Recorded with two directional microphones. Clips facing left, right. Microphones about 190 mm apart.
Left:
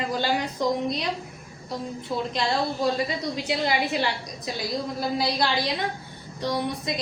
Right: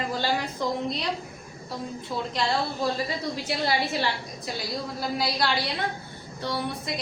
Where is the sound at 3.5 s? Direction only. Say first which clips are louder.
Left 2 dB; 15° left (ahead or behind).